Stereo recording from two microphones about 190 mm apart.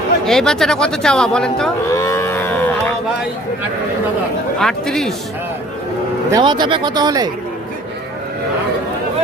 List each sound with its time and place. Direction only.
0.3 s speech: centre (ahead or behind)
1.9 s cattle: 15° left (ahead or behind)
4.6 s speech: centre (ahead or behind)
6.3 s speech: 25° right (ahead or behind)